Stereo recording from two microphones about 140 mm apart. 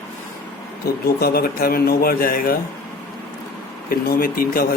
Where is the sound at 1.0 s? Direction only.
90° left.